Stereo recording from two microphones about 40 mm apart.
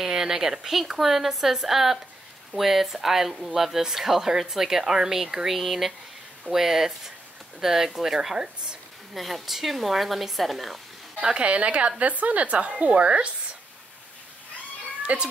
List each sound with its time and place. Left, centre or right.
0.0 s speech: centre
11.1 s a woman's voice: right
15.1 s a woman's voice: right